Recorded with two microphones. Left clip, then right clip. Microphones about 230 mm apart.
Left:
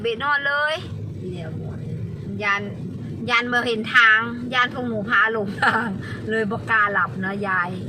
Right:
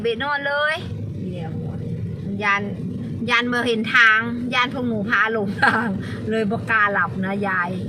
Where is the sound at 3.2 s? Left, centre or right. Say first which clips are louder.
Right 1 dB; centre.